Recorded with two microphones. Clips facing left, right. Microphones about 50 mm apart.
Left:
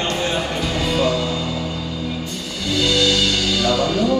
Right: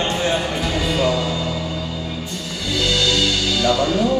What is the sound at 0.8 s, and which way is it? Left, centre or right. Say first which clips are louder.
Music: left 1 dB; centre.